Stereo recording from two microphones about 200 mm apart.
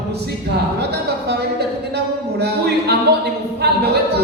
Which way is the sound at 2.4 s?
55° right (ahead or behind).